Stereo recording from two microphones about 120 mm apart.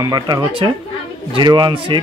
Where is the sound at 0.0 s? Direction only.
35° right (ahead or behind).